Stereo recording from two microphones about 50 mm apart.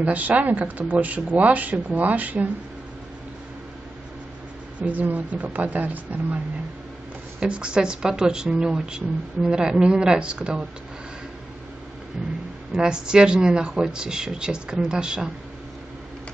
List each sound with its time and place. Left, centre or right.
0.0 s speech: right
4.7 s speech: right
7.3 s speech: right
12.8 s speech: centre